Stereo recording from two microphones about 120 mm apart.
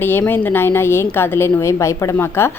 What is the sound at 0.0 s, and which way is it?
A woman's voice, 15° left (ahead or behind).